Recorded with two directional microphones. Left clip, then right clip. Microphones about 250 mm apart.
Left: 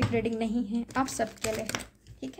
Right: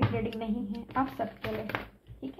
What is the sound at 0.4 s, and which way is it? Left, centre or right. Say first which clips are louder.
Speech: left 5 dB; left.